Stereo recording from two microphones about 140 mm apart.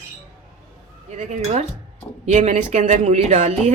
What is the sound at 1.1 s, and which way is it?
Speech, 55° right (ahead or behind).